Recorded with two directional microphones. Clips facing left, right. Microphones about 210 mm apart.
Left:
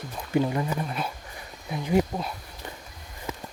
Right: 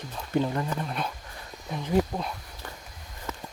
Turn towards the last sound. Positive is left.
turn(degrees=10)  # may be behind; listen again after turning